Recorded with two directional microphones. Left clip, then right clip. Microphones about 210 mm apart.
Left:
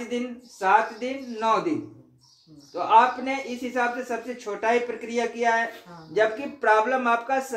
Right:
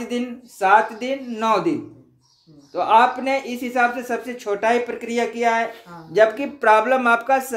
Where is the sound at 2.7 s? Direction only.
50° right (ahead or behind).